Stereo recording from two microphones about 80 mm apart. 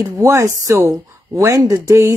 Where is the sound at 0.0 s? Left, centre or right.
Right.